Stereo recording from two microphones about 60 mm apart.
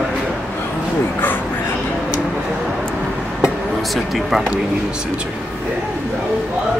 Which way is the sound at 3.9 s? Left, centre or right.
Centre.